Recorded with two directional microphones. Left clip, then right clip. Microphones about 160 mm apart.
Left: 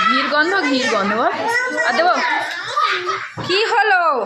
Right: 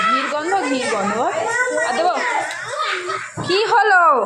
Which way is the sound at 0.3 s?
15° left (ahead or behind).